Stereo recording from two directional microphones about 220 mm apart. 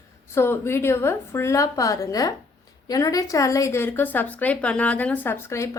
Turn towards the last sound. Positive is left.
turn(degrees=15)  # may be behind; listen again after turning